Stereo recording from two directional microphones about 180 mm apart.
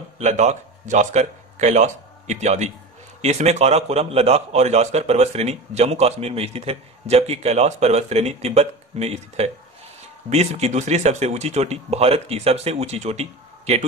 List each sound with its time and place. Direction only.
0.2 s a man's voice: 40° right (ahead or behind)